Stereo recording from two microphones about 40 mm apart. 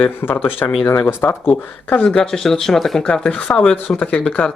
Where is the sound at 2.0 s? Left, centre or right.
Left.